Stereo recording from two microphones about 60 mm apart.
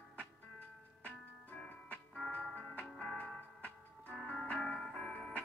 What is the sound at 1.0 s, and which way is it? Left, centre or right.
Music, left.